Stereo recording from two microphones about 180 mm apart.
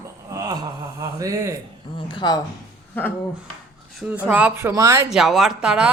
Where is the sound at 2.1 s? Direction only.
25° left (ahead or behind).